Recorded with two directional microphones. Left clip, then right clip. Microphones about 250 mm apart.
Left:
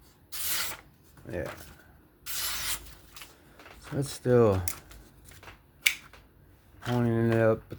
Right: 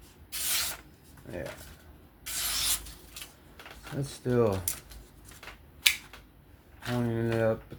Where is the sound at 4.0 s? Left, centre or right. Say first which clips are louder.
Left 4 dB; left.